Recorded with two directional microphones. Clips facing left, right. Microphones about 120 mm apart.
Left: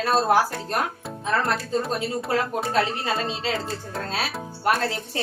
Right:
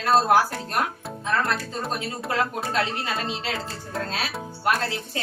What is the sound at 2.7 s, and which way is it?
Speech, 30° left (ahead or behind).